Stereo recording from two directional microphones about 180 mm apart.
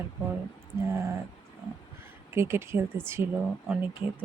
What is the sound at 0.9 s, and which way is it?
Speech, 15° right (ahead or behind).